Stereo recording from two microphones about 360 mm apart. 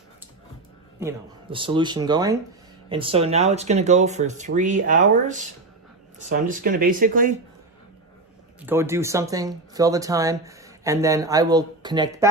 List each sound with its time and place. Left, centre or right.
0.9 s speech: centre
8.6 s speech: centre